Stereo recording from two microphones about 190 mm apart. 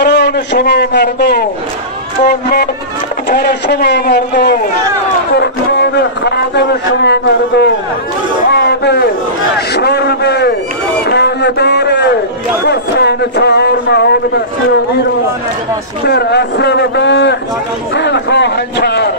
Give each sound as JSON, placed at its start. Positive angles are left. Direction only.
{"t": 0.0, "sound": "a man's voice", "side_deg": 65}
{"t": 11.1, "sound": "a sound", "side_deg": 60}
{"t": 12.6, "sound": "a man's voice", "side_deg": 60}
{"t": 16.1, "sound": "a man's voice", "side_deg": 60}